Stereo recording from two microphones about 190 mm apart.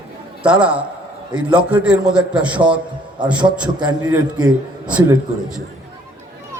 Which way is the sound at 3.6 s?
20° right (ahead or behind).